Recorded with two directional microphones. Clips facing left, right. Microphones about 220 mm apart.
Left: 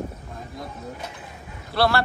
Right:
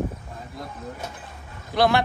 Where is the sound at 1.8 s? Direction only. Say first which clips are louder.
Right 1 dB; 15° right (ahead or behind).